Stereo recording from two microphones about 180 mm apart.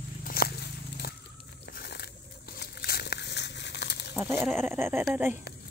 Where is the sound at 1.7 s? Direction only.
60° left (ahead or behind).